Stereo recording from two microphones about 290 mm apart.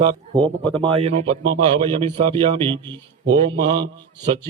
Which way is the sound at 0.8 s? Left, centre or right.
Centre.